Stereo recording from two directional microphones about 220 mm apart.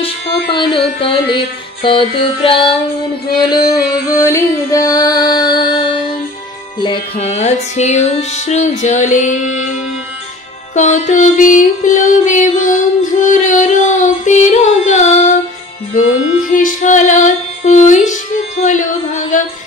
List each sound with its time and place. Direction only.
0.6 s music: 25° left (ahead or behind)
10.7 s music: 35° left (ahead or behind)
16.5 s music: 35° left (ahead or behind)
18.6 s a sound: 35° left (ahead or behind)